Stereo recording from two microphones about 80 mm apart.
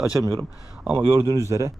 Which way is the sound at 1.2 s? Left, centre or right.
Right.